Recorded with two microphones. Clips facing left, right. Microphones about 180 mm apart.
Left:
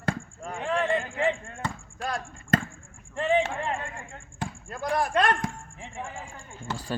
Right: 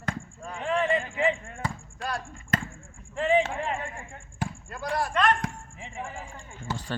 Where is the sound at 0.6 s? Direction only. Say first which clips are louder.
Right 1 dB; 5° right (ahead or behind).